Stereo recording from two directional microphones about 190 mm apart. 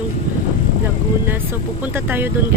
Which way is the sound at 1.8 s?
10° right (ahead or behind).